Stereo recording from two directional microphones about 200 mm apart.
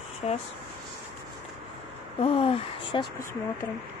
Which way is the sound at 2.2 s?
30° left (ahead or behind).